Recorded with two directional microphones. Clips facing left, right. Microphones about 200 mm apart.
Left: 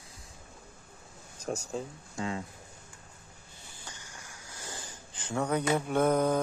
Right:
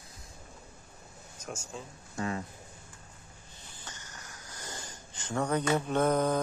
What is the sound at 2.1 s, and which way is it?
Speech, 15° left (ahead or behind).